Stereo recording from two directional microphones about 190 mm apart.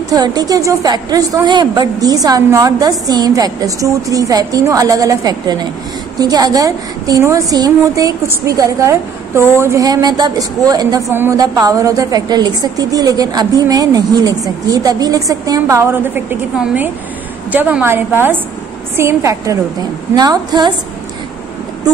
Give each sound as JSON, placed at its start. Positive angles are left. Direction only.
{"t": 0.1, "sound": "a woman's voice", "side_deg": -20}